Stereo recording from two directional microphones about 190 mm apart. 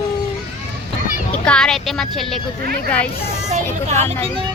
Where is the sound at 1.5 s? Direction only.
5° left (ahead or behind).